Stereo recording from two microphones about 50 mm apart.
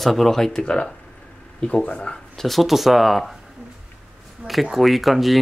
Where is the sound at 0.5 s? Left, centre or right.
Centre.